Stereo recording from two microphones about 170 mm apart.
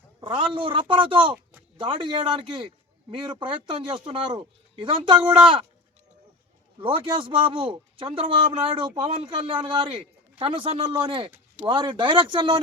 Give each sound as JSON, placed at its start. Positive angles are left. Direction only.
{"t": 0.2, "sound": "a man's voice", "side_deg": -30}
{"t": 6.7, "sound": "a man's voice", "side_deg": -30}